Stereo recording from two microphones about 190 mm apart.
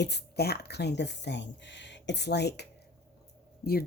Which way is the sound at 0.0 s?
60° left (ahead or behind).